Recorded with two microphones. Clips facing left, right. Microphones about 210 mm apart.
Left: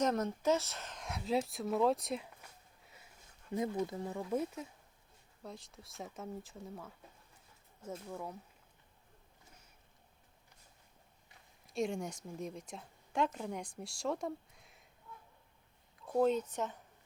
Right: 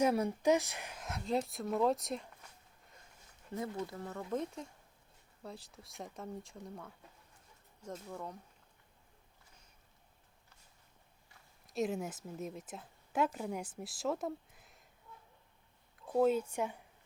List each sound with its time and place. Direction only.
0.0 s speech: 10° right (ahead or behind)
2.8 s a sound: 5° left (ahead or behind)
3.5 s speech: 15° left (ahead or behind)
11.6 s speech: centre (ahead or behind)
16.1 s speech: 5° right (ahead or behind)